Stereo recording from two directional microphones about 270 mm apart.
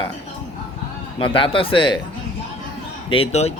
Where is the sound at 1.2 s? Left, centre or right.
Centre.